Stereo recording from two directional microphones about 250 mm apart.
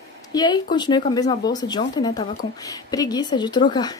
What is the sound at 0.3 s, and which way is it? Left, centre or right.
Speech, centre.